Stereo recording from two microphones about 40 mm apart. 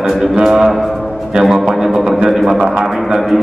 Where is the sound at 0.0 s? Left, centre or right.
Centre.